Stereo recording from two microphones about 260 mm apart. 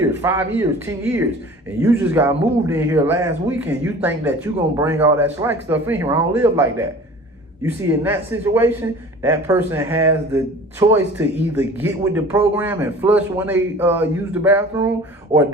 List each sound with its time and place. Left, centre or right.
0.0 s speech: centre